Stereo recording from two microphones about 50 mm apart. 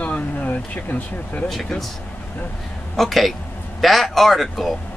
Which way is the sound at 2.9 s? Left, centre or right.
Centre.